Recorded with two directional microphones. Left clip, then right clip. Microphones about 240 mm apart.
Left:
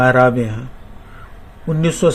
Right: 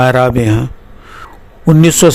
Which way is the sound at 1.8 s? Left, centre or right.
Right.